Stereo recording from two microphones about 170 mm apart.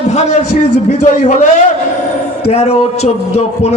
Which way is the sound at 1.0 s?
45° left (ahead or behind).